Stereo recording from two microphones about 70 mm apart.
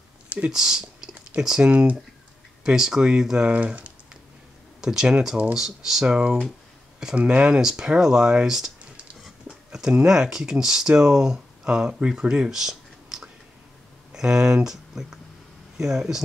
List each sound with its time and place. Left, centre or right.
0.5 s speech: centre
3.5 s speech: centre